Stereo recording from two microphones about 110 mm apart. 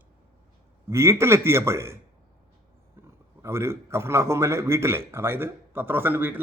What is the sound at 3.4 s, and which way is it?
A man's voice, 25° right (ahead or behind).